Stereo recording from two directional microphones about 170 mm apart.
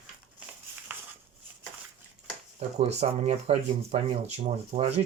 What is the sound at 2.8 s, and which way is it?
Speech, 40° right (ahead or behind).